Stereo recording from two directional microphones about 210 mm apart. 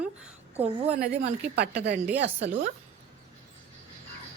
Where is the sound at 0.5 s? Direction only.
30° right (ahead or behind).